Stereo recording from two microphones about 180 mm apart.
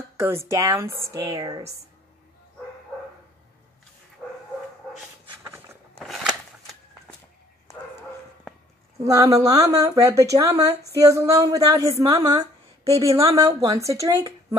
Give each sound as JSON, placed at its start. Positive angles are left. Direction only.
{"t": 0.2, "sound": "a woman's voice", "side_deg": -15}
{"t": 5.4, "sound": "walk", "side_deg": -15}
{"t": 5.9, "sound": "a sound", "side_deg": 0}
{"t": 9.0, "sound": "a woman's voice", "side_deg": -20}